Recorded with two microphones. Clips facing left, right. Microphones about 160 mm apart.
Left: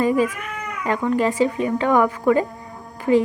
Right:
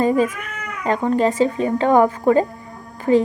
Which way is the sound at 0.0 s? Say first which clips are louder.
Right 1 dB; 30° right (ahead or behind).